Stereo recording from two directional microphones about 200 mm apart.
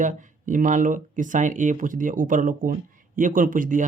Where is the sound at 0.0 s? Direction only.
40° right (ahead or behind).